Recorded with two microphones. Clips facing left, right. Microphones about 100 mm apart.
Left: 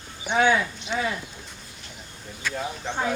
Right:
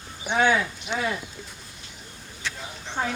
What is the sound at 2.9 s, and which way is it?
Speech, 60° left (ahead or behind).